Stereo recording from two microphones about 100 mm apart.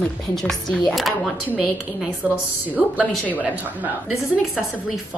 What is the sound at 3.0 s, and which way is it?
Speech, 10° left (ahead or behind).